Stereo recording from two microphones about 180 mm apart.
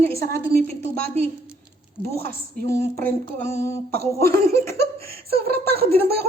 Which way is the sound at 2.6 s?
15° left (ahead or behind).